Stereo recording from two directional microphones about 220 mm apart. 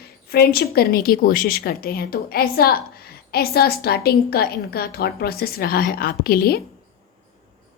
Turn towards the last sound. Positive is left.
turn(degrees=45)  # may be behind; listen again after turning